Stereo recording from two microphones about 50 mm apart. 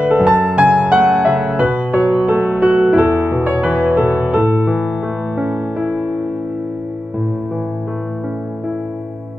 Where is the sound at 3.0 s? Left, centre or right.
Right.